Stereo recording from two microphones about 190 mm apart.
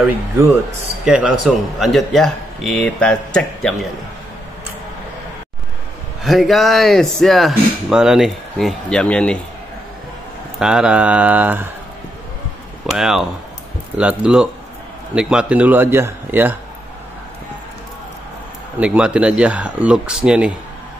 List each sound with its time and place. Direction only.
1.0 s speech: 5° right (ahead or behind)
6.2 s speech: centre (ahead or behind)
10.6 s speech: 5° right (ahead or behind)
12.9 s speech: centre (ahead or behind)
18.8 s speech: 5° right (ahead or behind)